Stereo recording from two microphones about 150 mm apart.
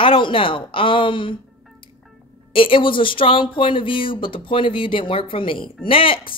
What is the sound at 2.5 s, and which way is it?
Speech, 35° left (ahead or behind).